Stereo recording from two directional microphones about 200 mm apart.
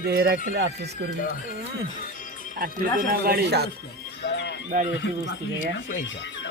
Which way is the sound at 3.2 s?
55° right (ahead or behind).